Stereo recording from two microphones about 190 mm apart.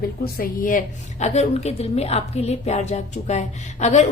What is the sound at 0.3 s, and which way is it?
A woman's voice, 50° left (ahead or behind).